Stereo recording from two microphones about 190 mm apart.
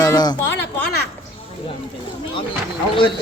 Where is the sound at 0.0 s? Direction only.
20° left (ahead or behind).